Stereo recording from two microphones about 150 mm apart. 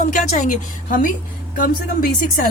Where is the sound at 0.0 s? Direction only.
55° left (ahead or behind).